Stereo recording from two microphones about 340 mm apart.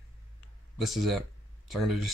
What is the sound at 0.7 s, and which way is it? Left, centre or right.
Speech, centre.